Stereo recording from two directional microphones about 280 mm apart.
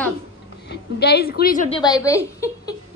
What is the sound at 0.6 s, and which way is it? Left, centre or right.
A woman's voice, left.